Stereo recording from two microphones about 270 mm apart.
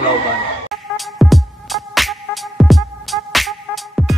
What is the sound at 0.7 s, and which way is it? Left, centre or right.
Music, centre.